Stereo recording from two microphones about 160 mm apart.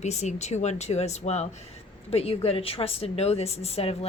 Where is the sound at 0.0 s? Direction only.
45° left (ahead or behind).